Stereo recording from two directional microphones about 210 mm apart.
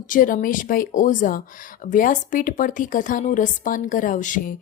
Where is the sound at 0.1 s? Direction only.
40° left (ahead or behind).